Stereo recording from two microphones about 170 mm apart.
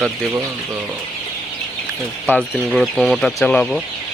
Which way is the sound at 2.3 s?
Centre (ahead or behind).